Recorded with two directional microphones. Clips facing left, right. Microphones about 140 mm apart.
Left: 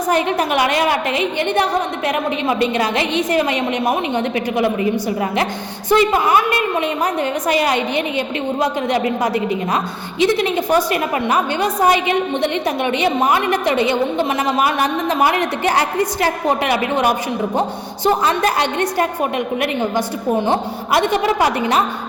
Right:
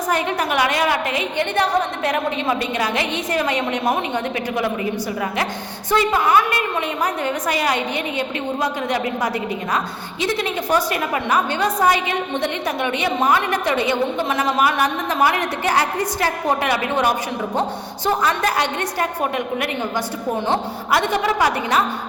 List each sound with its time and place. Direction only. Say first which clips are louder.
0.1 s a woman's voice: left 4 dB; 25° left (ahead or behind)
2.7 s a woman's voice: left 4 dB; 25° left (ahead or behind)
5.9 s a woman's voice: left 3 dB; 20° left (ahead or behind)
20.5 s a woman's voice: left 2 dB; 20° left (ahead or behind)